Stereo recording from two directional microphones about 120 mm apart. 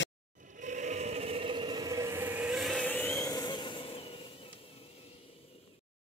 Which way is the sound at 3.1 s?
30° left (ahead or behind).